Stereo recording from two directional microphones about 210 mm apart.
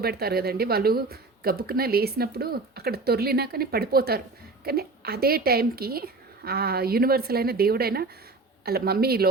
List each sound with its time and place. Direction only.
0.0 s speech: 45° right (ahead or behind)